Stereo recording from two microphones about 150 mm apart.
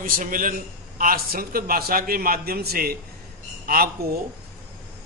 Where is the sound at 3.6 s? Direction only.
75° right (ahead or behind).